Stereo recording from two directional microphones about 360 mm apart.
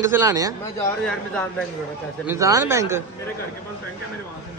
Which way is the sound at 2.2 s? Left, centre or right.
Centre.